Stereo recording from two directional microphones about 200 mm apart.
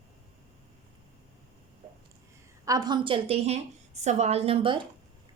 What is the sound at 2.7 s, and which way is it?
A woman's voice, 20° right (ahead or behind).